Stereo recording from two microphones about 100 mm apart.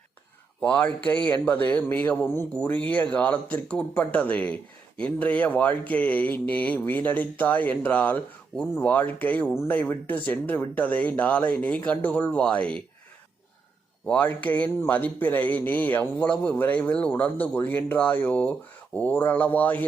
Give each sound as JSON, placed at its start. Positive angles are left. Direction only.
{"t": 0.6, "sound": "speech", "side_deg": 15}
{"t": 14.1, "sound": "speech", "side_deg": 15}